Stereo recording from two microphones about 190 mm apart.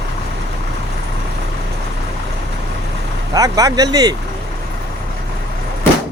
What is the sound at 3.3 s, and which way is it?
Speech, 20° right (ahead or behind).